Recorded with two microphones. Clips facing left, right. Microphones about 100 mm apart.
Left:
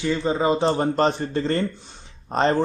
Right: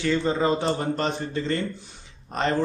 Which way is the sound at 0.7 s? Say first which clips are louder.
Left 5 dB; 40° left (ahead or behind).